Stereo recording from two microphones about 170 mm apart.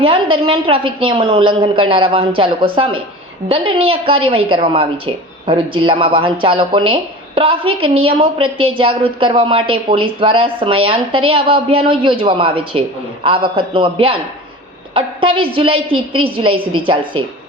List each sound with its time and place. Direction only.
0.0 s a woman's voice: 30° right (ahead or behind)